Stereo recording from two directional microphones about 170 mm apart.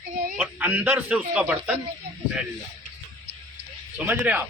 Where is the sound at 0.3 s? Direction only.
10° right (ahead or behind).